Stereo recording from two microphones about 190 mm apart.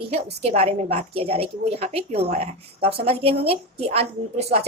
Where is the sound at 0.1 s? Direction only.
30° right (ahead or behind).